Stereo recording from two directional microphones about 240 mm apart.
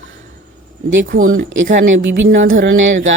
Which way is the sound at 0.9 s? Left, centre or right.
Right.